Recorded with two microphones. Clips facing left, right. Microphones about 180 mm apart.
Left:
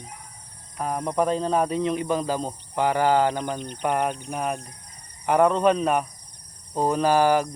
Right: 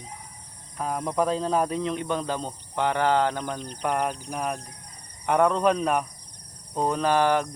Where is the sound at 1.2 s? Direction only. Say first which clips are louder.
Left 2 dB; centre (ahead or behind).